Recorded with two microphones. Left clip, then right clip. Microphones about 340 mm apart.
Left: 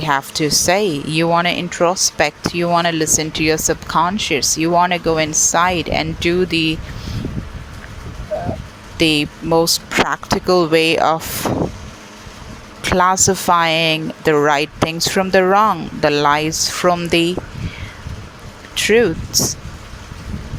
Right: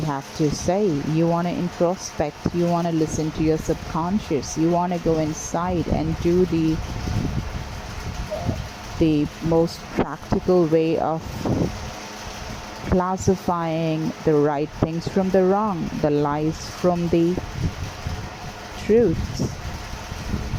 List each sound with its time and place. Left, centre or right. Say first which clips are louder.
0.0 s speech: left 7 dB; left
9.0 s speech: left 6 dB; left
12.9 s speech: left 8 dB; left
18.8 s speech: left 5 dB; left